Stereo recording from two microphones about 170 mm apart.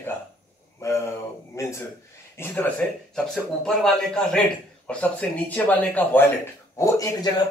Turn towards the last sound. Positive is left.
turn(degrees=20)  # may be behind; listen again after turning